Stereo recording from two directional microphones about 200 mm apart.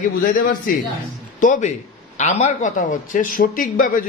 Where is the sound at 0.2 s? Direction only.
45° left (ahead or behind).